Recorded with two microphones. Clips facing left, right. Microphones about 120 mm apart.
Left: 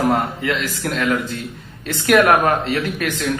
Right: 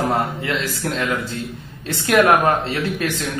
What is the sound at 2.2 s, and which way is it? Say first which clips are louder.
Speech: even; 30° right (ahead or behind).